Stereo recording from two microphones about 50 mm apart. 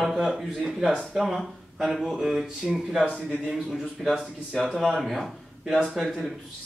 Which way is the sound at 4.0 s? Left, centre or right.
Centre.